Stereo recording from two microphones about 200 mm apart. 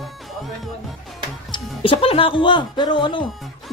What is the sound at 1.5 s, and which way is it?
Speech, 25° left (ahead or behind).